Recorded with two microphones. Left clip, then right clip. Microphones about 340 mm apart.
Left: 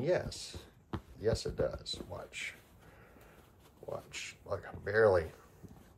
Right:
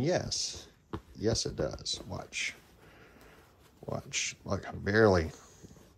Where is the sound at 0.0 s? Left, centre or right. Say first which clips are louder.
Right 2 dB; centre.